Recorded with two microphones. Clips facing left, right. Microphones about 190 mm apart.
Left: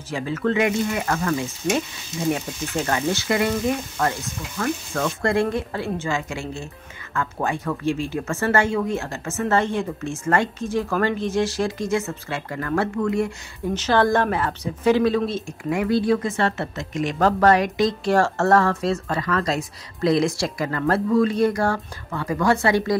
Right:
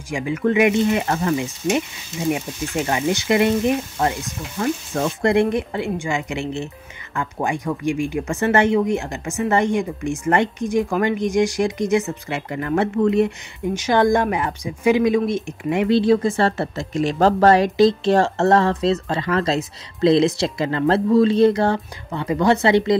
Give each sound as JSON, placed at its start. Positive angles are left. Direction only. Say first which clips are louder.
{"t": 0.1, "sound": "speech", "louder": "right 3 dB", "side_deg": -15}